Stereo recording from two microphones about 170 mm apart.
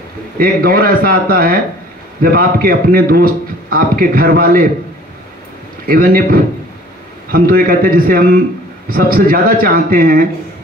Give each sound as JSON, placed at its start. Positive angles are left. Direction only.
{"t": 0.4, "sound": "a man's voice", "side_deg": -60}
{"t": 5.9, "sound": "a man's voice", "side_deg": -55}